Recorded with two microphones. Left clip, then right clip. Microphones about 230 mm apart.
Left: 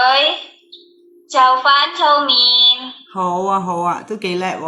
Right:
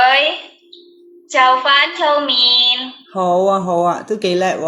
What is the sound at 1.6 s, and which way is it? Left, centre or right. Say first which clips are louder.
Child singing: left 1 dB; centre.